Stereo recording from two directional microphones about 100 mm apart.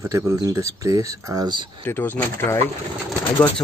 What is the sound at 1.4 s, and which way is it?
Speech, 50° right (ahead or behind).